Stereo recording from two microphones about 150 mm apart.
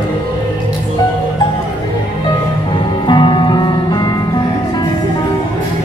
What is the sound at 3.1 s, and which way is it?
Music, 30° left (ahead or behind).